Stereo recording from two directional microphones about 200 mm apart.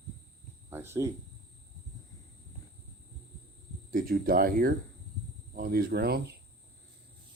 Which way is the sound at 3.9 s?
45° right (ahead or behind).